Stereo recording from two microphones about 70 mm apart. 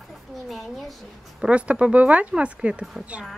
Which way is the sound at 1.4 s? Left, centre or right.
Centre.